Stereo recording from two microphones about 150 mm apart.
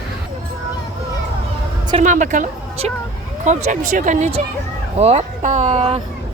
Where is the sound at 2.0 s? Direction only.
55° right (ahead or behind).